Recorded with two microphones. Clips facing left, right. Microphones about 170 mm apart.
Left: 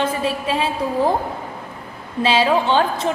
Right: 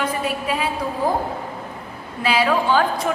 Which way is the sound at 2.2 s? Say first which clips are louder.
Left 2 dB; 25° left (ahead or behind).